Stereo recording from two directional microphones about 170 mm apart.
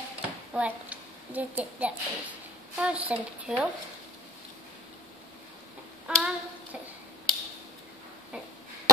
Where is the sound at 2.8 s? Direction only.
5° right (ahead or behind).